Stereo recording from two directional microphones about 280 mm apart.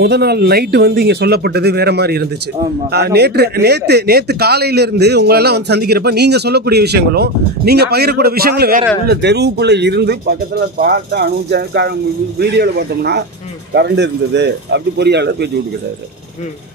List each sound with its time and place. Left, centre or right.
0.0 s speech: right